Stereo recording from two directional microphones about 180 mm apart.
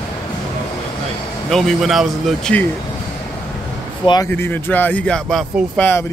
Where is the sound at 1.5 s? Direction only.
Centre (ahead or behind).